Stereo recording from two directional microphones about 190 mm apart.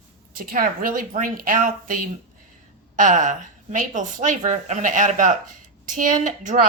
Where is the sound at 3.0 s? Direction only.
40° right (ahead or behind).